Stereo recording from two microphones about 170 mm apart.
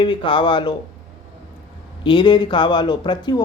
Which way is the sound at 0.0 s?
30° left (ahead or behind).